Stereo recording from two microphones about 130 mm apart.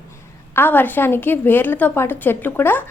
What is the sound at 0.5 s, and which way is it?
A woman's voice, 15° left (ahead or behind).